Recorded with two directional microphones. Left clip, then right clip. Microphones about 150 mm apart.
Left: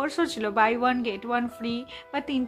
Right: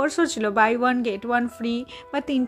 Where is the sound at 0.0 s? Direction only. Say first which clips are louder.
Right 5 dB; 35° right (ahead or behind).